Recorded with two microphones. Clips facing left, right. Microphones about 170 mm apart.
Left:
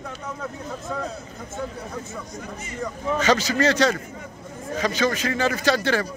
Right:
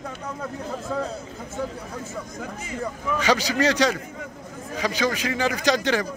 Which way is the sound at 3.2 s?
10° right (ahead or behind).